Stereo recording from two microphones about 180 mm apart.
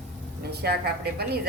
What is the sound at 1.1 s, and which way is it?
Speech, 60° right (ahead or behind).